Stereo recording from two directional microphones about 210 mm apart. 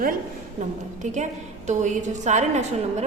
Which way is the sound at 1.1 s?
35° right (ahead or behind).